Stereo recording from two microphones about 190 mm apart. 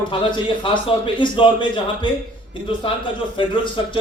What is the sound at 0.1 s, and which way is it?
Speech, 25° left (ahead or behind).